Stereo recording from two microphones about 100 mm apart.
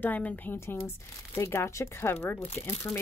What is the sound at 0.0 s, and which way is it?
Speech, 15° left (ahead or behind).